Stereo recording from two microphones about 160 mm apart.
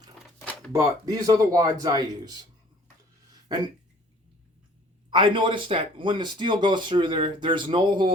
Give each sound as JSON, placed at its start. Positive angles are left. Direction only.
{"t": 0.3, "sound": "a sound", "side_deg": 10}
{"t": 0.7, "sound": "speech", "side_deg": -20}
{"t": 5.1, "sound": "speech", "side_deg": -30}